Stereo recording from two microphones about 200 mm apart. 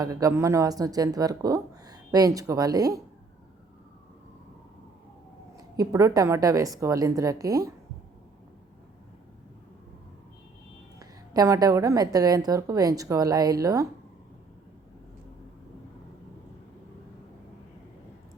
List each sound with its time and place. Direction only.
0.0 s speech: 15° right (ahead or behind)
5.5 s speech: 20° right (ahead or behind)
11.0 s speech: 15° right (ahead or behind)